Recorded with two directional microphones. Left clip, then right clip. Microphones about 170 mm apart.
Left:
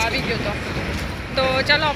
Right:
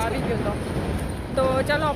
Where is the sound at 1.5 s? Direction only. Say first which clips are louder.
Left 6 dB; 15° right (ahead or behind).